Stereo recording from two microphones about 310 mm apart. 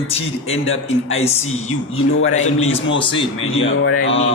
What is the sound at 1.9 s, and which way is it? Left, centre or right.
Speech, left.